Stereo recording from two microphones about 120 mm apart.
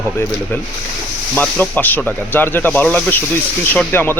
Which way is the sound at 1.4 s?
15° left (ahead or behind).